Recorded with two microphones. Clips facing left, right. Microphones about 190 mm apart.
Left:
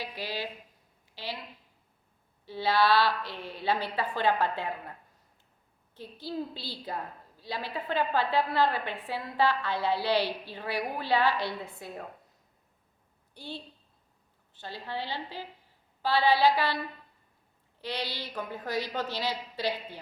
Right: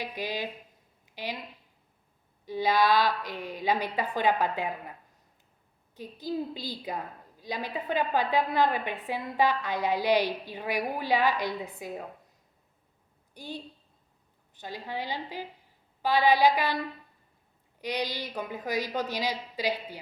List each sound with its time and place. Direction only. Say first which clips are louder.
0.0 s a woman's voice: right 2 dB; 20° right (ahead or behind)
2.5 s a woman's voice: right 1 dB; 15° right (ahead or behind)
6.0 s a woman's voice: right 3 dB; 15° right (ahead or behind)
13.3 s a woman's voice: right 2 dB; 15° right (ahead or behind)
14.6 s a woman's voice: right 1 dB; 15° right (ahead or behind)
17.7 s a woman's voice: right 3 dB; 15° right (ahead or behind)